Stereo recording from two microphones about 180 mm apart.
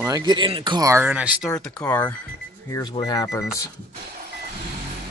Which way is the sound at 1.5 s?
15° left (ahead or behind).